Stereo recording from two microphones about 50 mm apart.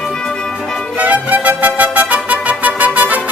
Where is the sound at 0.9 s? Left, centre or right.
Right.